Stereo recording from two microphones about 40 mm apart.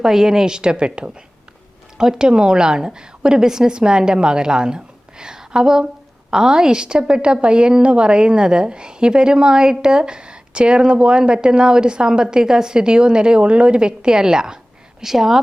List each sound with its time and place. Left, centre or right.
0.0 s a woman's voice: centre